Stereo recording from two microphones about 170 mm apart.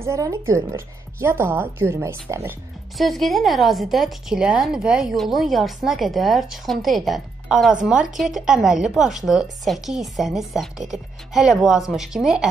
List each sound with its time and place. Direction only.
0.0 s speech: 20° right (ahead or behind)
3.0 s a woman's voice: centre (ahead or behind)